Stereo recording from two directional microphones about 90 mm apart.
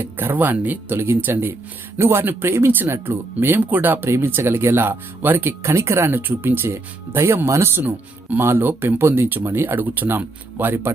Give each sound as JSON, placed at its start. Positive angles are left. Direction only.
{"t": 0.0, "sound": "speech", "side_deg": -25}